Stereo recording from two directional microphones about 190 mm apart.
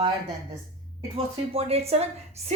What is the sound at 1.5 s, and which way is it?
Speech, 30° right (ahead or behind).